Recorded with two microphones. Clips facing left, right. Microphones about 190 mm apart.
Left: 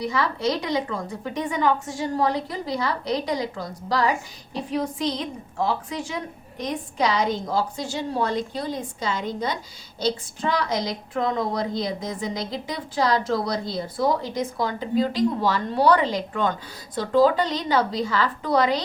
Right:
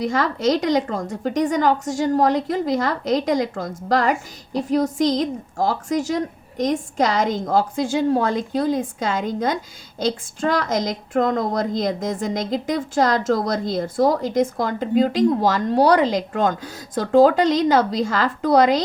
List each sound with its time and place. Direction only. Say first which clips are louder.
0.0 s a woman's voice: right 4 dB; 45° right (ahead or behind)